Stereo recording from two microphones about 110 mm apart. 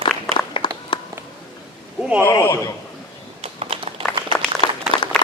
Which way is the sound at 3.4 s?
60° right (ahead or behind).